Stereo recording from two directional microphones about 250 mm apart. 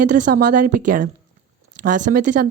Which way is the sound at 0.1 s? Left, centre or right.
Right.